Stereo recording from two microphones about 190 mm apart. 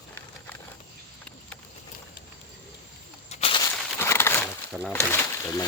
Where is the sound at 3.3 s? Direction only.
30° left (ahead or behind).